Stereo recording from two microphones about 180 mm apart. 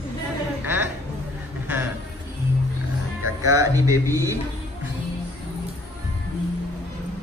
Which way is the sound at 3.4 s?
15° right (ahead or behind).